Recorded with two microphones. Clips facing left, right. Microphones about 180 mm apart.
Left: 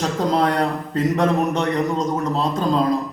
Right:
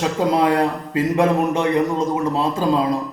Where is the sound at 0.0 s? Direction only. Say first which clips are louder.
Right 2 dB; 5° right (ahead or behind).